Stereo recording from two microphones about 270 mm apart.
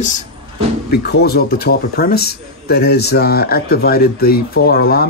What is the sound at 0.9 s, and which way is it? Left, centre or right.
Speech, left.